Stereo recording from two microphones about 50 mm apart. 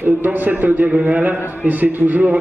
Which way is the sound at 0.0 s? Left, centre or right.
Right.